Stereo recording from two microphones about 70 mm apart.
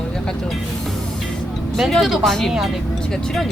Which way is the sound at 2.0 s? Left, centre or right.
Centre.